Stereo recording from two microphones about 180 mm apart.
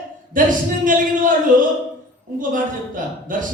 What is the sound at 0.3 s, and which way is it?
Speech, 50° right (ahead or behind).